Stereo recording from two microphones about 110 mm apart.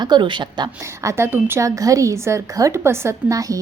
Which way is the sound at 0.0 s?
45° right (ahead or behind).